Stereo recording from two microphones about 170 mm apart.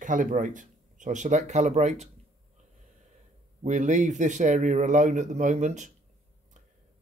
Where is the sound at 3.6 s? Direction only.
45° right (ahead or behind).